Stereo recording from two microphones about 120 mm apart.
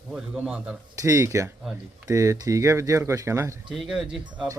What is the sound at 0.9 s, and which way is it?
Speech, 25° right (ahead or behind).